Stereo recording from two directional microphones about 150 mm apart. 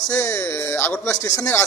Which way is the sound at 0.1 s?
10° left (ahead or behind).